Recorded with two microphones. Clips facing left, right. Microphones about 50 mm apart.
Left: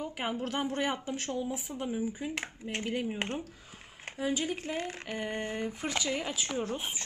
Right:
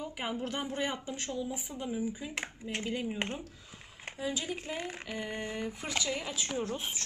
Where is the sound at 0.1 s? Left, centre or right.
Left.